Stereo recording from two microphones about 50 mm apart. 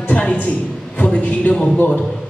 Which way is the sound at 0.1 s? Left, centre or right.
Left.